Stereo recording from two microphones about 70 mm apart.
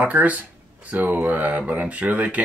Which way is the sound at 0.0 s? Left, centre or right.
Right.